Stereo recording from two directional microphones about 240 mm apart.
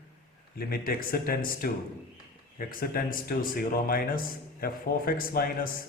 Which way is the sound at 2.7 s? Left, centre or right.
Left.